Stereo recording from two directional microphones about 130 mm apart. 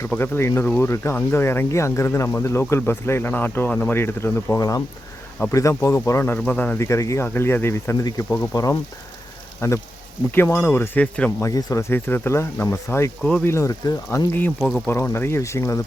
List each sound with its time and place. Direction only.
0.0 s speech: 15° left (ahead or behind)
11.4 s speech: 25° left (ahead or behind); by 13.5 s 10° left (ahead or behind)
13.5 s speech: 25° left (ahead or behind)
14.8 s speech: 20° left (ahead or behind)